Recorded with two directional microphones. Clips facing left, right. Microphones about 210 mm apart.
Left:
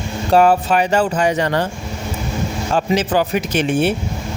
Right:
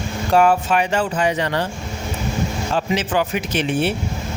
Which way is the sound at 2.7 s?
40° left (ahead or behind).